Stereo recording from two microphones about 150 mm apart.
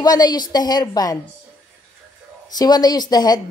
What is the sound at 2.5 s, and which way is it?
Speech, 25° left (ahead or behind).